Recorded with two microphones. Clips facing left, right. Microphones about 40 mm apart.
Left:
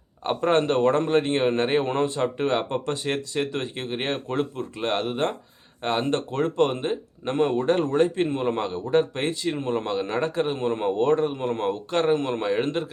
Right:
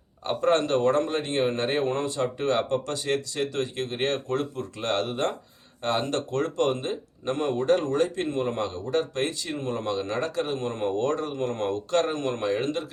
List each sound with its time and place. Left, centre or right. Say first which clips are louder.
0.3 s speech: left 1 dB; left